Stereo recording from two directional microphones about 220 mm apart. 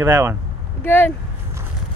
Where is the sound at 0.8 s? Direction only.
10° left (ahead or behind).